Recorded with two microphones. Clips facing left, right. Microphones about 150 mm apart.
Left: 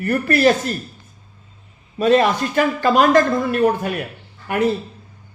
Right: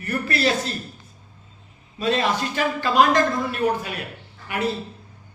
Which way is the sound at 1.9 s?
50° left (ahead or behind).